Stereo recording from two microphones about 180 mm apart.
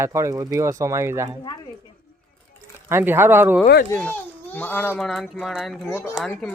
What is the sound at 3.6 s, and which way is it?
Speech, 60° left (ahead or behind).